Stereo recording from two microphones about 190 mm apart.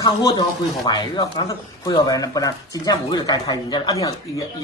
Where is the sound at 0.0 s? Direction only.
20° left (ahead or behind).